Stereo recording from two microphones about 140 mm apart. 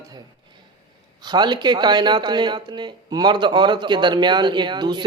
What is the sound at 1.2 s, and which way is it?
Speech, 30° right (ahead or behind).